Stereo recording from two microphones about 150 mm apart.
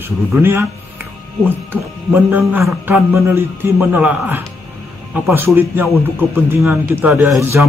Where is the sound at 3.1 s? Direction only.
15° right (ahead or behind).